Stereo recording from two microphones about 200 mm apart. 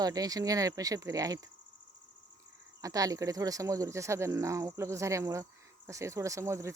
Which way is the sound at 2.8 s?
15° right (ahead or behind).